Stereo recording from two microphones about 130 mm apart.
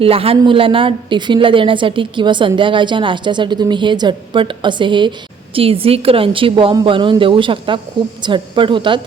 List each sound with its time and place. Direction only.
0.0 s a woman's voice: 45° right (ahead or behind)